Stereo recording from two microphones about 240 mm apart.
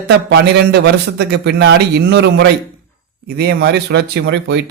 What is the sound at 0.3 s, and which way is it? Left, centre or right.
A man's voice, right.